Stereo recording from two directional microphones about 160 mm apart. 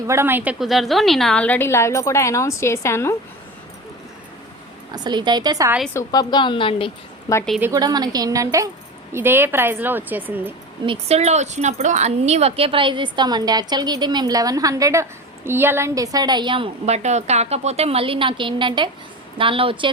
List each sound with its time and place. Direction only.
0.1 s a woman's voice: 15° right (ahead or behind)
0.6 s a woman's voice: centre (ahead or behind); by 3.2 s 15° left (ahead or behind)
5.0 s speech: 25° right (ahead or behind)
5.9 s a woman's voice: 20° left (ahead or behind)
7.6 s a woman's voice: 20° right (ahead or behind)
10.8 s a woman's voice: 40° right (ahead or behind)